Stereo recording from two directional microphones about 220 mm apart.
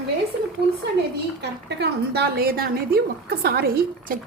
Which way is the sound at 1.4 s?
50° right (ahead or behind).